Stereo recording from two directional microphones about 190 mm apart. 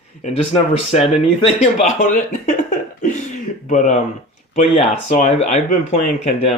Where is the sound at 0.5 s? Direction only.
30° left (ahead or behind).